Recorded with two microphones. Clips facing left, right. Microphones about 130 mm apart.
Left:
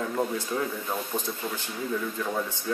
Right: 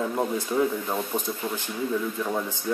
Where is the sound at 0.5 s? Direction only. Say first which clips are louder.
Right 9 dB; 20° right (ahead or behind).